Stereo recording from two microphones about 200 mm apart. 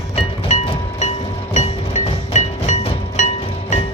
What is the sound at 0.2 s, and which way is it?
Music, 30° left (ahead or behind).